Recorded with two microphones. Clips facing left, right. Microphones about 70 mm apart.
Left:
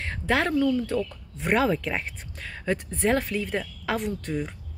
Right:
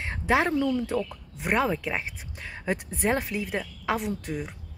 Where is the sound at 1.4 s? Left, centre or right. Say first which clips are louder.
Left 2 dB; centre.